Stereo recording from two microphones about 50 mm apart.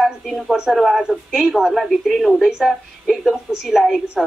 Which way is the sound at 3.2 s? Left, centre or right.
Centre.